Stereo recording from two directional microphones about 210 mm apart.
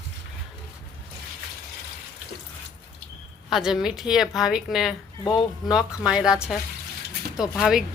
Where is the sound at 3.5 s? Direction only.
Centre (ahead or behind).